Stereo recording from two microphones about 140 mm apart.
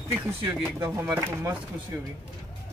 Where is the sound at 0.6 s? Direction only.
20° right (ahead or behind).